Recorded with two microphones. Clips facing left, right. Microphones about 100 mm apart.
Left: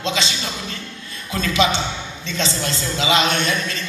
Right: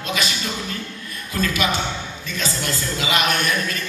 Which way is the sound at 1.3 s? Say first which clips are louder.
Left 3 dB; 25° left (ahead or behind).